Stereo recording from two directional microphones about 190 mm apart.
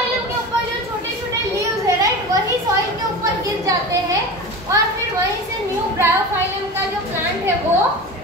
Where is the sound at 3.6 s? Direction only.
15° right (ahead or behind).